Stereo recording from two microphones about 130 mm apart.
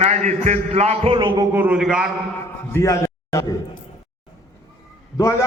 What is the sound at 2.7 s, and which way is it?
Speech, 25° left (ahead or behind).